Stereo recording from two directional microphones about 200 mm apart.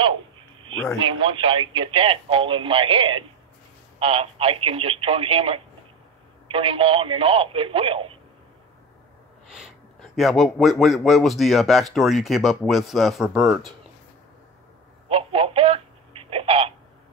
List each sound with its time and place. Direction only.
0.9 s speech: 25° right (ahead or behind)
10.1 s speech: centre (ahead or behind)
15.0 s telephone: 30° right (ahead or behind)